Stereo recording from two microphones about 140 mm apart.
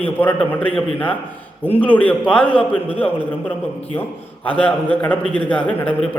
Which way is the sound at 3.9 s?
15° left (ahead or behind).